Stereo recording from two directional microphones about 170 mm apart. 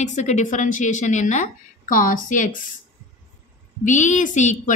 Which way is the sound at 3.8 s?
45° left (ahead or behind).